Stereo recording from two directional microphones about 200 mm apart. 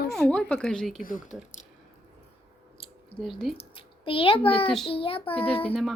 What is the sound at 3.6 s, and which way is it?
A child's voice, 25° left (ahead or behind).